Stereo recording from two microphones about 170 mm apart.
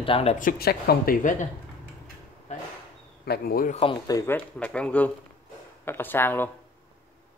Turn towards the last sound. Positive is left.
turn(degrees=10)  # may be behind; listen again after turning